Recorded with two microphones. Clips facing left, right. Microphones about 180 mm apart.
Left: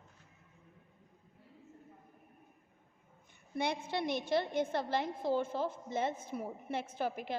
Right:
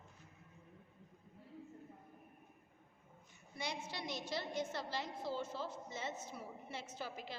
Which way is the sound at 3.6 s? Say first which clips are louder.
Left 10 dB; 55° left (ahead or behind).